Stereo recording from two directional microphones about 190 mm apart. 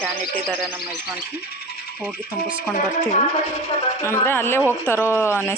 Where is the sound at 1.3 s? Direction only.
55° left (ahead or behind).